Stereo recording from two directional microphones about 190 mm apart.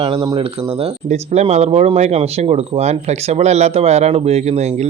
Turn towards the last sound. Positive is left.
turn(degrees=-35)  # may be behind; listen again after turning